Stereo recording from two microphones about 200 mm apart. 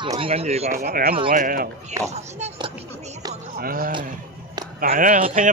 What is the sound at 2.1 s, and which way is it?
Speech, 35° right (ahead or behind).